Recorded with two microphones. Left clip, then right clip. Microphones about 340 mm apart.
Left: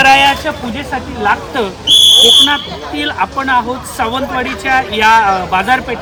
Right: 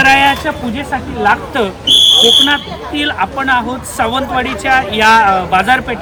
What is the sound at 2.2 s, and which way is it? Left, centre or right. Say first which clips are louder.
A man's voice: left 1 dB; centre.